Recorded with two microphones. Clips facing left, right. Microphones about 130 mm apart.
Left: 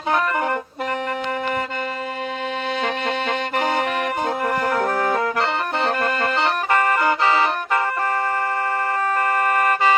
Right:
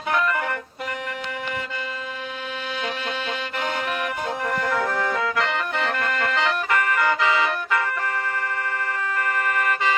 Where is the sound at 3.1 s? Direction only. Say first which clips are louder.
Left 6 dB; 85° left.